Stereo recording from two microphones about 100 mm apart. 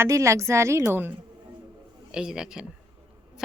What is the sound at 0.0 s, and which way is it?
A woman's voice, 30° right (ahead or behind).